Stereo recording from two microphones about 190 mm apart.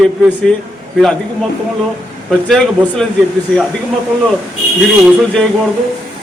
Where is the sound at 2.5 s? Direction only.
5° left (ahead or behind).